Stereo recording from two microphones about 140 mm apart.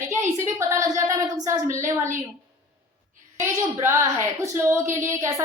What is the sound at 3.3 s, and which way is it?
A woman's voice, 20° right (ahead or behind).